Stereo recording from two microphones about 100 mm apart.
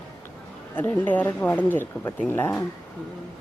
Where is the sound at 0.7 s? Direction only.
20° left (ahead or behind).